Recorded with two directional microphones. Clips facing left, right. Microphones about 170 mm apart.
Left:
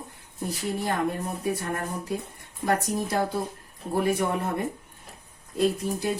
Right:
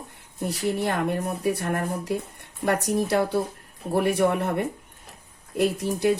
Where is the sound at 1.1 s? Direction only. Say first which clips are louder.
Right 4 dB; 70° right (ahead or behind).